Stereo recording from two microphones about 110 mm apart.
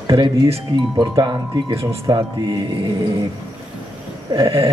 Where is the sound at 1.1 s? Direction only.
35° right (ahead or behind).